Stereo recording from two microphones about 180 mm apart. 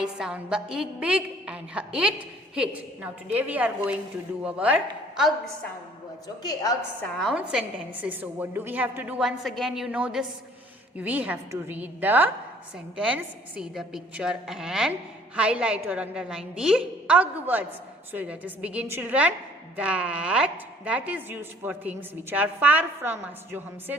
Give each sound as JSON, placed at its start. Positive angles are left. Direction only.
{"t": 0.0, "sound": "a woman's voice", "side_deg": -5}
{"t": 6.2, "sound": "a woman's voice", "side_deg": 20}
{"t": 7.0, "sound": "a woman's voice", "side_deg": 0}
{"t": 13.6, "sound": "a woman's voice", "side_deg": -5}